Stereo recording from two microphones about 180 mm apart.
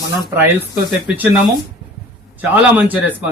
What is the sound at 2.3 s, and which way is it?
Speech, 10° right (ahead or behind).